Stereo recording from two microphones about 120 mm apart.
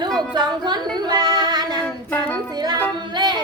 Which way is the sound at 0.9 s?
35° right (ahead or behind).